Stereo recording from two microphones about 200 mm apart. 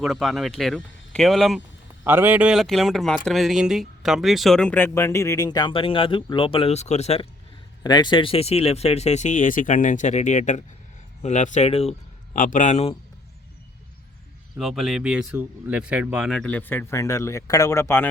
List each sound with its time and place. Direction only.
0.0 s speech: centre (ahead or behind); by 7.3 s 30° left (ahead or behind)
7.9 s speech: 20° left (ahead or behind)
14.6 s speech: centre (ahead or behind)